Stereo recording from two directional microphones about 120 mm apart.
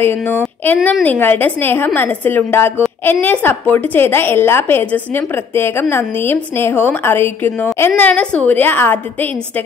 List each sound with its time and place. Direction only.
0.0 s a woman's voice: 20° left (ahead or behind)